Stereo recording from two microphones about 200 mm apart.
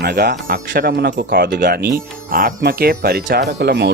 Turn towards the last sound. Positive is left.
turn(degrees=-55)  # may be behind; listen again after turning